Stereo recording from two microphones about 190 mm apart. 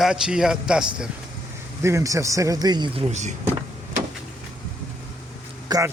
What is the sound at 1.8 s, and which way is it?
A man's voice, 15° right (ahead or behind).